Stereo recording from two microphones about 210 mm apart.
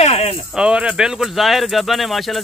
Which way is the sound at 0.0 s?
30° left (ahead or behind).